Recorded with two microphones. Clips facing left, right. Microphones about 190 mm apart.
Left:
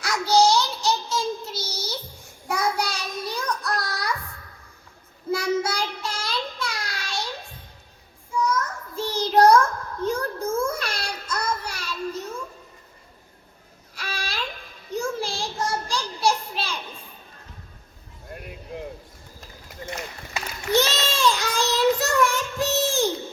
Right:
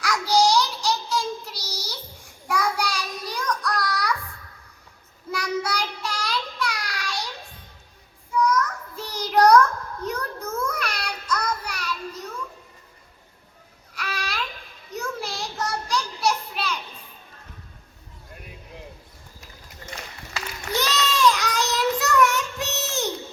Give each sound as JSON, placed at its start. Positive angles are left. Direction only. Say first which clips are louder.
{"t": 0.0, "sound": "child singing", "louder": "left 1 dB", "side_deg": 25}
{"t": 5.3, "sound": "child singing", "louder": "left 3 dB", "side_deg": 25}
{"t": 8.3, "sound": "child singing", "louder": "right 3 dB", "side_deg": 25}
{"t": 13.9, "sound": "a sound", "louder": "right 1 dB", "side_deg": 30}
{"t": 20.3, "sound": "child singing", "louder": "left 6 dB", "side_deg": 25}